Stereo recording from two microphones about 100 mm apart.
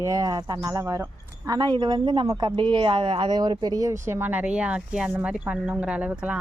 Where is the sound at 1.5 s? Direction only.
45° right (ahead or behind).